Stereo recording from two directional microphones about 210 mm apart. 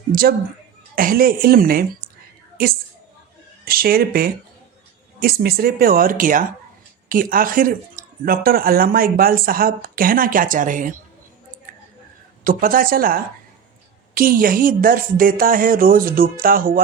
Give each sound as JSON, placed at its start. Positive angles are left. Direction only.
{"t": 0.1, "sound": "speech", "side_deg": -45}
{"t": 3.7, "sound": "speech", "side_deg": -45}
{"t": 11.7, "sound": "a sound", "side_deg": -40}
{"t": 12.5, "sound": "speech", "side_deg": -40}